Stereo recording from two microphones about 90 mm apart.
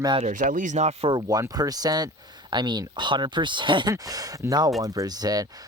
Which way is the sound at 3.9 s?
45° right (ahead or behind).